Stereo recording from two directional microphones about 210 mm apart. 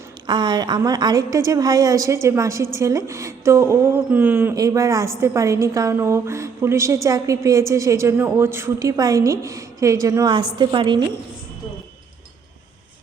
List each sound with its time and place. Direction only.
0.3 s a woman's voice: 20° right (ahead or behind)